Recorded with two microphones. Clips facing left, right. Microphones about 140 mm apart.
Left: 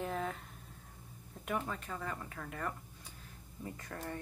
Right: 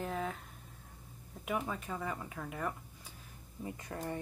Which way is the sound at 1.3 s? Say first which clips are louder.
Right 1 dB; 5° right (ahead or behind).